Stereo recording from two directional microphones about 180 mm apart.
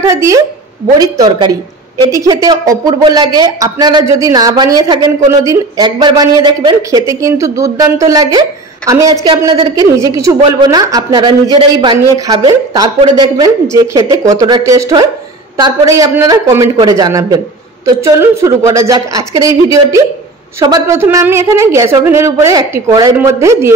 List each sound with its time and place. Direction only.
0.1 s a woman's voice: 15° right (ahead or behind)